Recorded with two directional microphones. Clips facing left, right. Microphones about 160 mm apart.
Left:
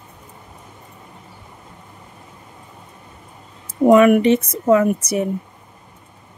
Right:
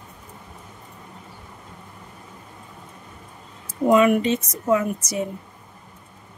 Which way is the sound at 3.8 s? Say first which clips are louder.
Left 6 dB; 60° left (ahead or behind).